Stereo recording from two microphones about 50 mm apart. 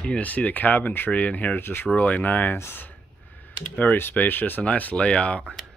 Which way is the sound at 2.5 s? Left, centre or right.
Left.